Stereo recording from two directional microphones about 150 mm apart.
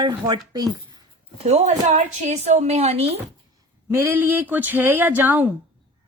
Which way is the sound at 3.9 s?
15° right (ahead or behind).